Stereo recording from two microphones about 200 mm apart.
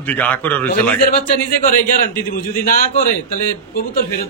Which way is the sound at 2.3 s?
45° left (ahead or behind).